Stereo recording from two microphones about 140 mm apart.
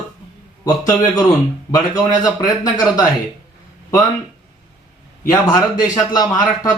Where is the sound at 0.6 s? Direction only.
25° left (ahead or behind).